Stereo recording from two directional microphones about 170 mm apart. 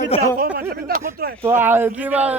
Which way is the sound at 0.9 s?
65° right (ahead or behind).